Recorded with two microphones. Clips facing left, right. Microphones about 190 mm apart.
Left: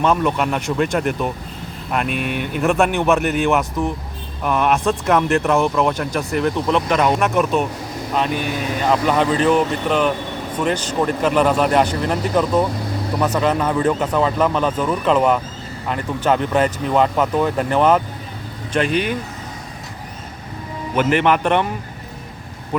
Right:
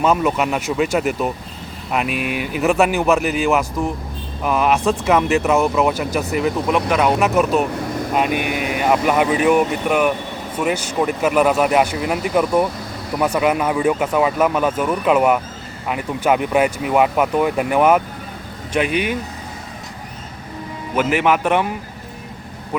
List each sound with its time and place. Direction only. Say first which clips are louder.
0.0 s speech: right 1 dB; 5° right (ahead or behind)
20.9 s speech: left 1 dB; 5° right (ahead or behind)
22.7 s speech: left 1 dB; 5° right (ahead or behind)